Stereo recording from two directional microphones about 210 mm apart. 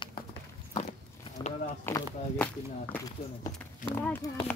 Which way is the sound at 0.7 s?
30° left (ahead or behind).